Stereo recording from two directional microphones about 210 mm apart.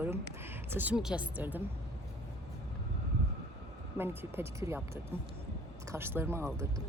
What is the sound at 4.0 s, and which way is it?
Speech, 10° right (ahead or behind).